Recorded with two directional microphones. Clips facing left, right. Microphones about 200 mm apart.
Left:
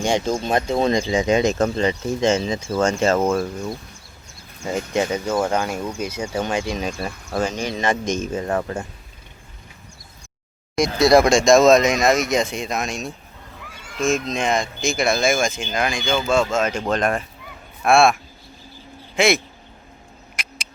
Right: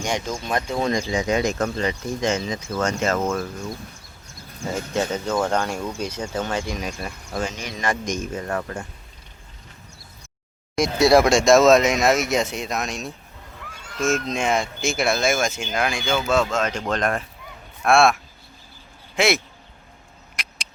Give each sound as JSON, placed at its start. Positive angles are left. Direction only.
{"t": 0.0, "sound": "speech", "side_deg": 25}
{"t": 4.7, "sound": "speech", "side_deg": 15}
{"t": 6.7, "sound": "speech", "side_deg": 25}
{"t": 10.8, "sound": "speech", "side_deg": -10}
{"t": 13.6, "sound": "honk", "side_deg": 0}
{"t": 14.3, "sound": "speech", "side_deg": -10}
{"t": 20.3, "sound": "a sound", "side_deg": 0}